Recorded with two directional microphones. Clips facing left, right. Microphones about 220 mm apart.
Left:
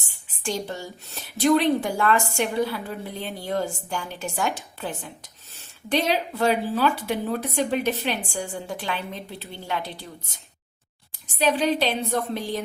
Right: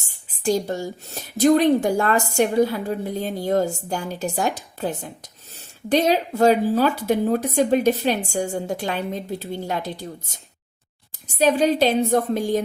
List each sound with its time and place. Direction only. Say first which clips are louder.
0.0 s speech: right 8 dB; 40° right (ahead or behind)